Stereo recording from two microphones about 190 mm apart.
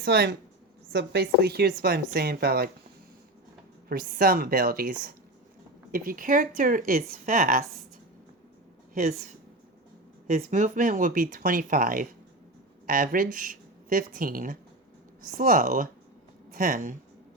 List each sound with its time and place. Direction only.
0.0 s speech: 60° right (ahead or behind)
3.8 s speech: 50° right (ahead or behind)
9.0 s speech: 45° right (ahead or behind)